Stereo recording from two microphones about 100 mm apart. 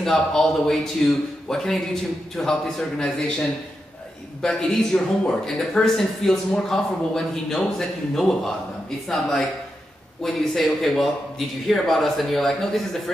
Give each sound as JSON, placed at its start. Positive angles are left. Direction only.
{"t": 0.0, "sound": "speech", "side_deg": 5}